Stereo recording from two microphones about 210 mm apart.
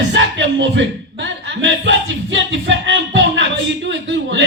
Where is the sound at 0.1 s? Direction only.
60° right (ahead or behind).